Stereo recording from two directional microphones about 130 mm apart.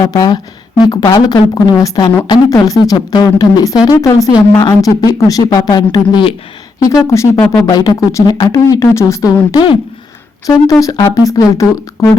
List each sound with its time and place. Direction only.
0.0 s a woman's voice: 30° left (ahead or behind)